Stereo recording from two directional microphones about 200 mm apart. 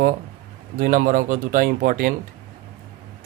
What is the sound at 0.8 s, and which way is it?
Speech, 45° right (ahead or behind).